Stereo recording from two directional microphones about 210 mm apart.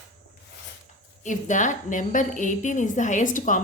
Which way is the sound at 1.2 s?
35° left (ahead or behind).